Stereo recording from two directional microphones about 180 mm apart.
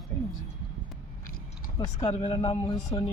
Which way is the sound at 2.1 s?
30° left (ahead or behind).